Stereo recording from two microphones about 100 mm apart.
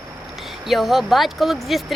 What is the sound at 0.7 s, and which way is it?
Speech, centre (ahead or behind).